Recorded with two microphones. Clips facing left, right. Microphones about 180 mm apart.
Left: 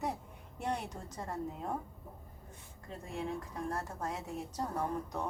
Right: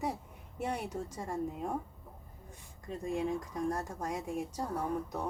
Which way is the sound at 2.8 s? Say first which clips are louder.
Right 6 dB; 15° right (ahead or behind).